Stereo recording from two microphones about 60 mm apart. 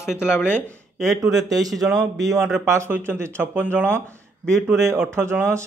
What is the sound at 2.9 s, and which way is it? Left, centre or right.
Speech, right.